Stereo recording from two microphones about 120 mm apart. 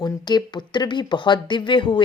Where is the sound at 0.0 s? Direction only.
35° left (ahead or behind).